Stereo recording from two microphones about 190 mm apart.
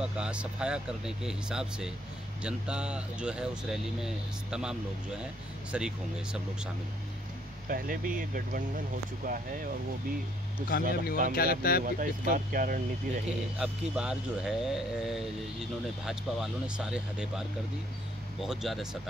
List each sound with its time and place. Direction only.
0.0 s speech: 5° right (ahead or behind)
7.6 s speech: 50° right (ahead or behind)
10.7 s speech: 55° left (ahead or behind)
11.8 s speech: 45° right (ahead or behind)
13.3 s speech: 5° right (ahead or behind)
18.4 s speech: centre (ahead or behind)